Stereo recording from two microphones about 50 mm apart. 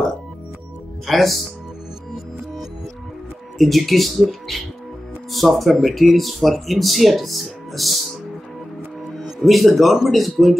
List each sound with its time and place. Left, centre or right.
1.0 s speech: centre
3.5 s speech: centre
9.2 s speech: centre